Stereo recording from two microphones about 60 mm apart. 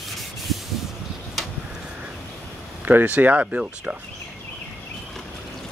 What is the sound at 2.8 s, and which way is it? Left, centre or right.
Speech, right.